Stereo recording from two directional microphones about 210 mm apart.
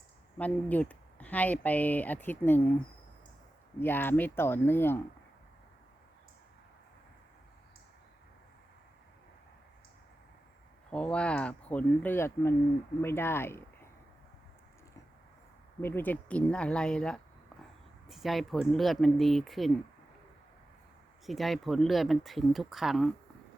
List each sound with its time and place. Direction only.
0.3 s speech: 5° left (ahead or behind)
3.8 s speech: 10° left (ahead or behind)
10.9 s speech: 5° left (ahead or behind)
15.8 s speech: 10° left (ahead or behind)
21.2 s speech: centre (ahead or behind)